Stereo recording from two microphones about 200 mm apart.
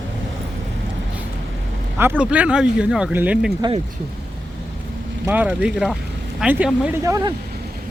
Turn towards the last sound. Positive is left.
turn(degrees=-5)  # may be behind; listen again after turning